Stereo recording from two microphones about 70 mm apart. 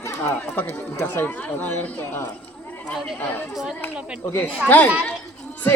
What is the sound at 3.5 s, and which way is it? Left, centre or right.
Speech, centre.